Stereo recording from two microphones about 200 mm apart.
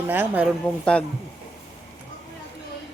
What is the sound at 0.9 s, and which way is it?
Speech, 5° left (ahead or behind).